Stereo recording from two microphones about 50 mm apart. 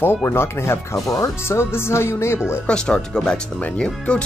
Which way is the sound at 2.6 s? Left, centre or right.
Centre.